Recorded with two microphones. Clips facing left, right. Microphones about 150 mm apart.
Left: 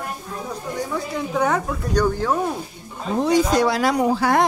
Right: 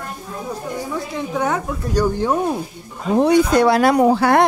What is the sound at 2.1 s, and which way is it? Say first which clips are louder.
Speech: right 3 dB; 20° right (ahead or behind).